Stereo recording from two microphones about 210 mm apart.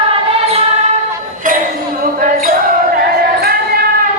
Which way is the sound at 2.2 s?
40° right (ahead or behind).